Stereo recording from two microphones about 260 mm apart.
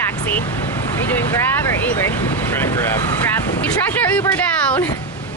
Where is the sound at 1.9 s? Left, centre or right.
Centre.